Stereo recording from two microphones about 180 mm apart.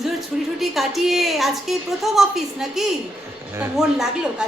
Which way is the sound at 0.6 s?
Centre (ahead or behind).